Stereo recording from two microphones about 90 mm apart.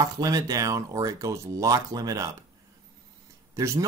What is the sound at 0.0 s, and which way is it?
Speech, 45° right (ahead or behind).